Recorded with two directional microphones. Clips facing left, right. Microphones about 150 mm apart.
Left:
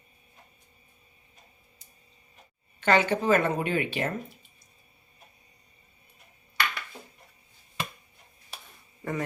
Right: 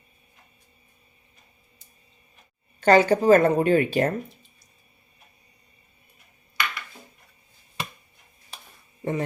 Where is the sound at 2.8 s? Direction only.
40° right (ahead or behind).